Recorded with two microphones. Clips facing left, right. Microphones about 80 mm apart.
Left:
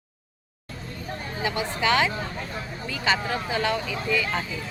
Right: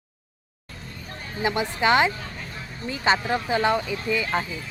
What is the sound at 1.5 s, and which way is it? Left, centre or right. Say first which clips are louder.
Speech: right 3 dB; right.